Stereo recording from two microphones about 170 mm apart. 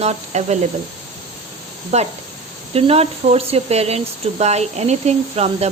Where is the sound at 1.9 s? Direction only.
40° right (ahead or behind).